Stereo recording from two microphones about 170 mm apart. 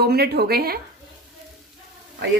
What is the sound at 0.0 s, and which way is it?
Speech, 65° right (ahead or behind).